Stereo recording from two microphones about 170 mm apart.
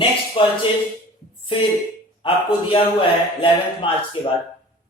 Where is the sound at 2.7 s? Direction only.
30° left (ahead or behind).